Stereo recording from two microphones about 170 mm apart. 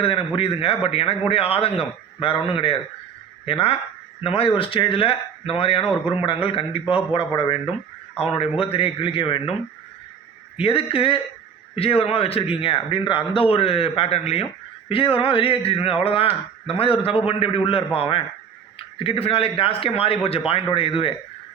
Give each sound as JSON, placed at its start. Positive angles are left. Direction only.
{"t": 0.0, "sound": "a man's voice", "side_deg": 35}
{"t": 10.6, "sound": "a man's voice", "side_deg": 35}